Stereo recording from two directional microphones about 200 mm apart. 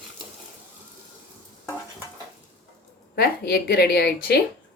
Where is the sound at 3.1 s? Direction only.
50° left (ahead or behind).